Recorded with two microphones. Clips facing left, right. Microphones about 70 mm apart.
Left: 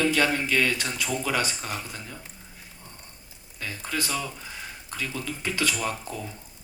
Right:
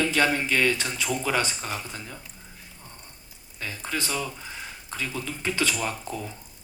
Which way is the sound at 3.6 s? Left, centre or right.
Right.